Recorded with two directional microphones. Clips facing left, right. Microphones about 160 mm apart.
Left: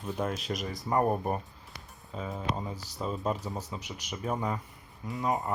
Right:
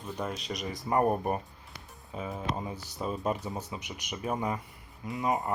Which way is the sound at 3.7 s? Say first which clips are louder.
Even; 15° right (ahead or behind).